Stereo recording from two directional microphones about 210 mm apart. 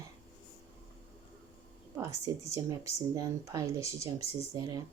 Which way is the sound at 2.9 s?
15° right (ahead or behind).